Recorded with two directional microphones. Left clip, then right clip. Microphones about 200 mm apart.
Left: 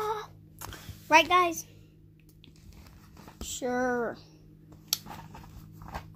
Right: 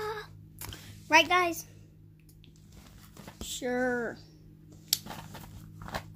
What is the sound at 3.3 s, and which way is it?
Speech, 5° left (ahead or behind).